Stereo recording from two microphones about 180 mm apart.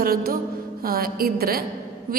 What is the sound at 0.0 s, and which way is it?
A woman's voice, 55° right (ahead or behind).